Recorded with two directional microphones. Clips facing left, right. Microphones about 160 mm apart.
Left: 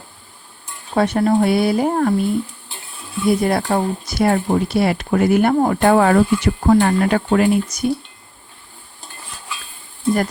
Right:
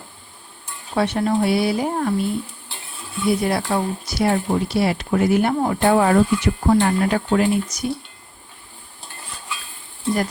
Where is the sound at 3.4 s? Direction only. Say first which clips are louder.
Left 3 dB; 45° left (ahead or behind).